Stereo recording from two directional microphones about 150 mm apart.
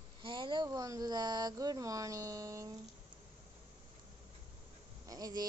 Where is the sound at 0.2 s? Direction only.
35° right (ahead or behind).